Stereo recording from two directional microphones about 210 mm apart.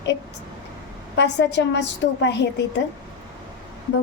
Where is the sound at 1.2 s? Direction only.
55° left (ahead or behind).